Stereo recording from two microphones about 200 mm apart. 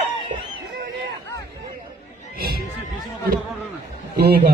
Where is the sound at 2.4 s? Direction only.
50° right (ahead or behind).